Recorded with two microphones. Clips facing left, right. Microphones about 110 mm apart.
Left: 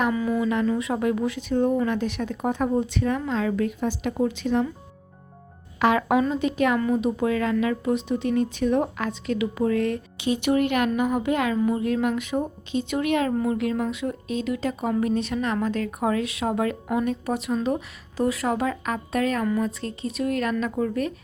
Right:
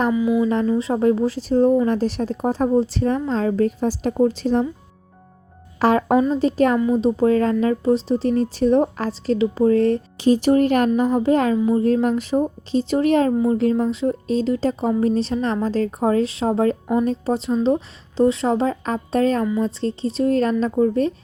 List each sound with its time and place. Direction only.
0.1 s speech: 10° right (ahead or behind)
0.4 s speech: 35° right (ahead or behind)
5.8 s a woman's voice: 35° right (ahead or behind)